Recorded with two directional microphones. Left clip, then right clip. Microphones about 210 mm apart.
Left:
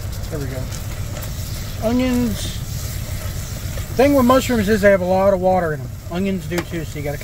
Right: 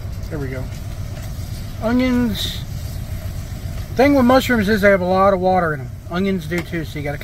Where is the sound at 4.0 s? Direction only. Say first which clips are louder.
Even; 5° left (ahead or behind).